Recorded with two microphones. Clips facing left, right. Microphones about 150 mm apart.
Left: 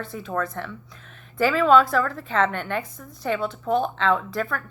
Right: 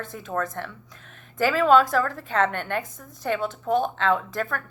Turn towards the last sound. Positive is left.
turn(degrees=-45)  # may be behind; listen again after turning